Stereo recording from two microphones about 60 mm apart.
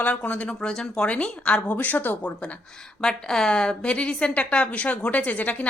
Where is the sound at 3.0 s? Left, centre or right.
Centre.